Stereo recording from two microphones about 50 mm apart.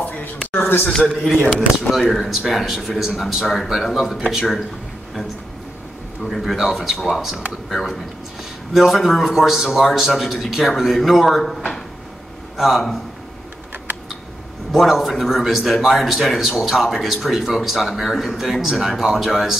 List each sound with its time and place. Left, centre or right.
0.0 s a sound: left
0.5 s a man's voice: left
0.8 s a man's voice: centre
6.2 s a man's voice: centre
12.5 s a man's voice: centre
14.7 s a man's voice: centre